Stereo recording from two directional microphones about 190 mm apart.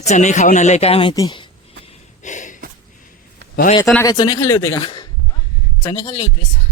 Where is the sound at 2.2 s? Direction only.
40° left (ahead or behind).